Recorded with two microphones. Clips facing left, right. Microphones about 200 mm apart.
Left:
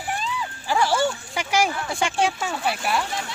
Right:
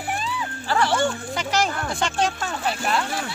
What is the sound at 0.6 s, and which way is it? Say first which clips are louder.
Speech: even; 5° left (ahead or behind).